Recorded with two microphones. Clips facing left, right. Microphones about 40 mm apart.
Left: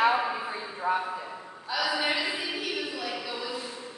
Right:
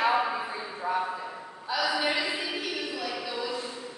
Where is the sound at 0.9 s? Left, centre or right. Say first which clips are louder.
Left 2 dB; left.